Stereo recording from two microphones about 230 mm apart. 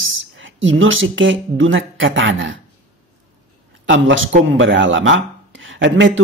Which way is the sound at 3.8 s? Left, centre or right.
Right.